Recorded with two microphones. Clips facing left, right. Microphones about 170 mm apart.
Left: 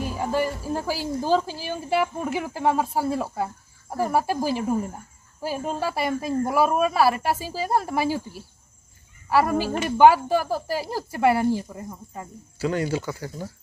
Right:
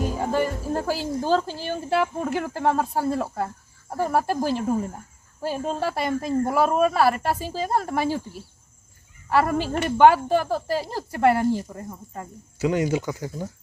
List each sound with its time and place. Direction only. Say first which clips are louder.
0.0 s speech: right 1 dB; 5° left (ahead or behind)
9.3 s speech: even; 5° left (ahead or behind)
12.5 s speech: right 2 dB; 20° right (ahead or behind)